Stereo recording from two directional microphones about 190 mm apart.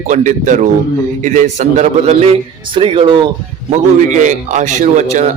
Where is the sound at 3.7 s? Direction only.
40° right (ahead or behind).